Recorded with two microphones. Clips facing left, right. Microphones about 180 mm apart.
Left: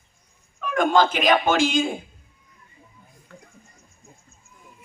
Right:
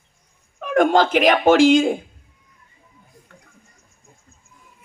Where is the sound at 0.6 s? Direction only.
70° right (ahead or behind).